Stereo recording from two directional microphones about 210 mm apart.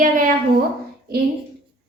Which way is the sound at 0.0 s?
40° right (ahead or behind).